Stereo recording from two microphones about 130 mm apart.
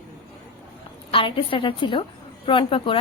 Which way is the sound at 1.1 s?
45° left (ahead or behind).